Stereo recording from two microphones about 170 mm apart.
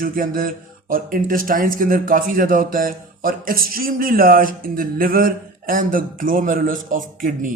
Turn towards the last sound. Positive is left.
turn(degrees=-50)  # may be behind; listen again after turning